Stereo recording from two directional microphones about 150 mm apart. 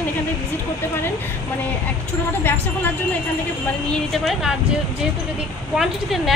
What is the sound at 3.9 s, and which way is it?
Speech, centre (ahead or behind).